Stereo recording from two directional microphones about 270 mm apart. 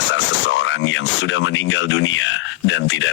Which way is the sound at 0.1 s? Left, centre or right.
Left.